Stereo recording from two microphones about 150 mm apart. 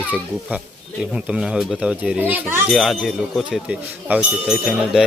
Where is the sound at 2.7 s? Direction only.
Centre (ahead or behind).